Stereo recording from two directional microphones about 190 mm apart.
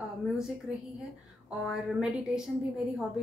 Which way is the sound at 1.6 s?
5° right (ahead or behind).